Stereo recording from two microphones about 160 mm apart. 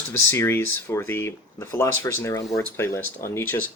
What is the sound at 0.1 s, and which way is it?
Speech, 15° left (ahead or behind).